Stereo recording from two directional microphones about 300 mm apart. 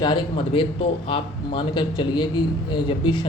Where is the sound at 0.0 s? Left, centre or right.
Centre.